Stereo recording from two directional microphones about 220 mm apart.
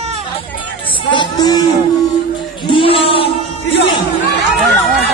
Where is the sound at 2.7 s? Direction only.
25° left (ahead or behind).